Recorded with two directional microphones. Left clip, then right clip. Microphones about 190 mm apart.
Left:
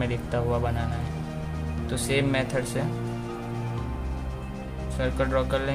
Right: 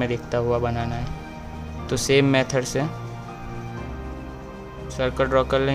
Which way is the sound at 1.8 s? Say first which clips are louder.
Right 7 dB; 40° right (ahead or behind).